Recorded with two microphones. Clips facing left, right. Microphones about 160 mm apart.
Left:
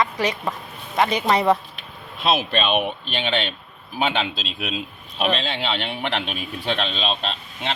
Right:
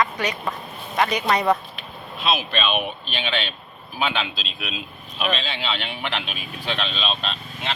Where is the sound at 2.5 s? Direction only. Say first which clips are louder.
Left 2 dB; 45° left (ahead or behind).